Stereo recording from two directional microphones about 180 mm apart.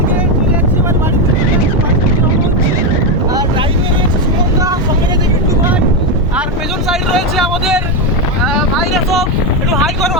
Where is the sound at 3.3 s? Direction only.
25° right (ahead or behind).